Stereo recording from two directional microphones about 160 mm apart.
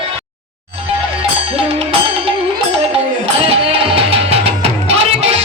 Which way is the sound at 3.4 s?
35° right (ahead or behind).